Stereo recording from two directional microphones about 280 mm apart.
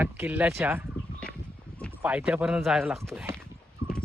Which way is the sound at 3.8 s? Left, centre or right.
Centre.